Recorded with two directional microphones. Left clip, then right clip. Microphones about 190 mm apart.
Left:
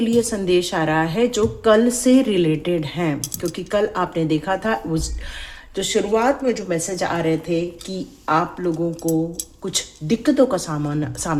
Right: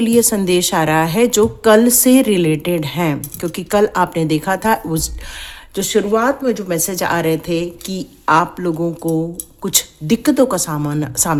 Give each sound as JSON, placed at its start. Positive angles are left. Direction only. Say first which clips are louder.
{"t": 0.0, "sound": "speech", "louder": "right 5 dB", "side_deg": -35}